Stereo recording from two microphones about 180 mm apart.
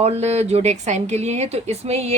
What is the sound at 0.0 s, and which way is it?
Speech, 35° right (ahead or behind).